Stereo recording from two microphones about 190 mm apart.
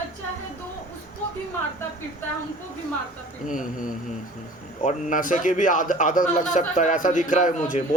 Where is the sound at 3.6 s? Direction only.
45° left (ahead or behind).